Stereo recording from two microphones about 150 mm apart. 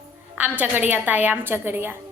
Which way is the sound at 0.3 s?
10° right (ahead or behind).